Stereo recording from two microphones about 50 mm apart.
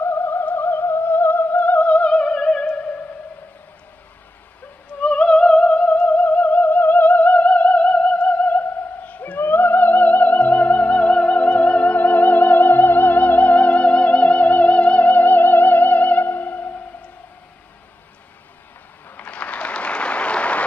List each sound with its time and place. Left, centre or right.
0.0 s music: left
5.0 s music: left
9.4 s music: left
19.1 s applause: left